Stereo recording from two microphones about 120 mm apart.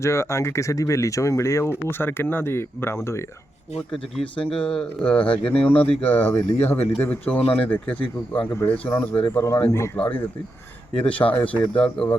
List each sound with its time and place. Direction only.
0.0 s speech: 25° left (ahead or behind)
3.8 s speech: 5° left (ahead or behind)
9.2 s speech: 25° left (ahead or behind); by 12.1 s 5° left (ahead or behind)